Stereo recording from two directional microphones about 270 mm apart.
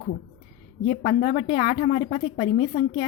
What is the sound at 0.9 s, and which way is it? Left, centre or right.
A woman's voice, left.